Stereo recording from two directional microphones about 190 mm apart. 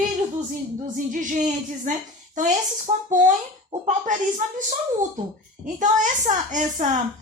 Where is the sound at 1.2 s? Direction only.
40° right (ahead or behind).